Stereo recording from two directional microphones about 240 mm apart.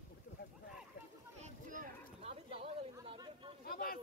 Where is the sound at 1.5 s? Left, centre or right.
Right.